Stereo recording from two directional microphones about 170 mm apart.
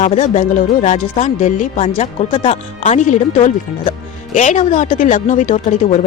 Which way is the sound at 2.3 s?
30° left (ahead or behind).